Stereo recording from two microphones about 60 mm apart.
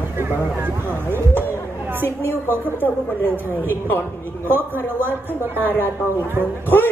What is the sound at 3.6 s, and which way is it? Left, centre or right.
A man's voice, left.